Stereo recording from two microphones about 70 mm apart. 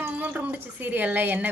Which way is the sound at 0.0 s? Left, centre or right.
Right.